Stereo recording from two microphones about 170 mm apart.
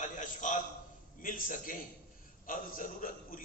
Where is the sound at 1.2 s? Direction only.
55° left (ahead or behind).